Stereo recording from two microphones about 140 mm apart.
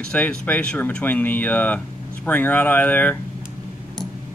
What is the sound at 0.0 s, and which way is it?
Speech, 10° left (ahead or behind).